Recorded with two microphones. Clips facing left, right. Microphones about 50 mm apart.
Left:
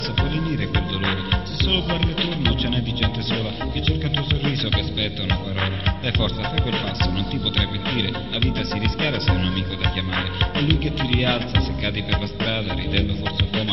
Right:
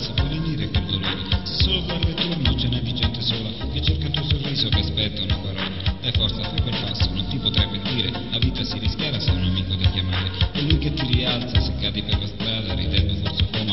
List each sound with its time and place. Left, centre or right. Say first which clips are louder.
0.5 s music: left 2 dB; left
2.1 s music: left 1 dB; centre
2.6 s music: left 2 dB; left
6.1 s music: left 3 dB; left
8.8 s music: left 5 dB; left
10.7 s music: left 2 dB; left